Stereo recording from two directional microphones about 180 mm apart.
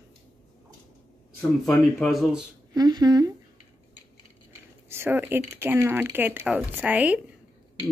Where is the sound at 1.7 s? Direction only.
Centre (ahead or behind).